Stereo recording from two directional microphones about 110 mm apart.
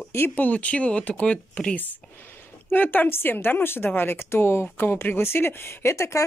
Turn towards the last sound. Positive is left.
turn(degrees=25)  # may be behind; listen again after turning